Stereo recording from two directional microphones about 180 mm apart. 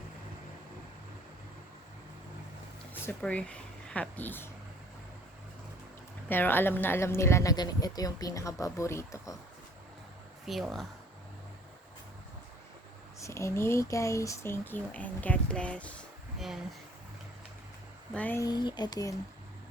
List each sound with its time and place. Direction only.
2.9 s speech: 10° left (ahead or behind)
6.2 s speech: 10° left (ahead or behind)
10.4 s speech: centre (ahead or behind)
13.1 s speech: 15° left (ahead or behind)
18.1 s speech: 10° left (ahead or behind)
18.4 s speech: 25° left (ahead or behind)